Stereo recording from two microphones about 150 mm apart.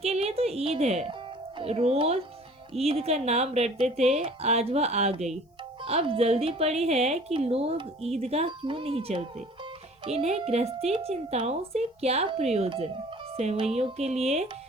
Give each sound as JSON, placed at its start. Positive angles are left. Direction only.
{"t": 0.0, "sound": "speech", "side_deg": -45}